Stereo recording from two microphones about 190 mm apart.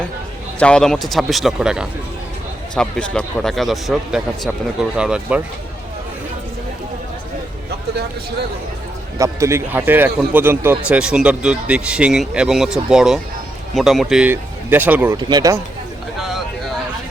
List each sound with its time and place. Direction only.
0.6 s a man's voice: 5° left (ahead or behind)
9.1 s a man's voice: 15° right (ahead or behind)
15.2 s a man's voice: 20° right (ahead or behind)